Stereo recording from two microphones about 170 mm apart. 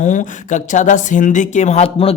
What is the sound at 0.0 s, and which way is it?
Speech, 45° left (ahead or behind).